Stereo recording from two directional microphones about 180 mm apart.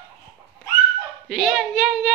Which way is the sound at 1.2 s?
Centre (ahead or behind).